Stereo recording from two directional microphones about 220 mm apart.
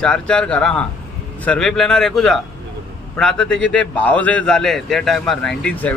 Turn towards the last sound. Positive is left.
turn(degrees=5)  # may be behind; listen again after turning